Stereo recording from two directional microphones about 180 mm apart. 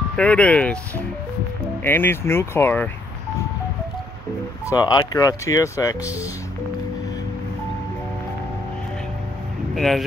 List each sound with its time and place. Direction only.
0.1 s speech: 5° left (ahead or behind)
4.6 s speech: 20° left (ahead or behind)
9.8 s speech: centre (ahead or behind)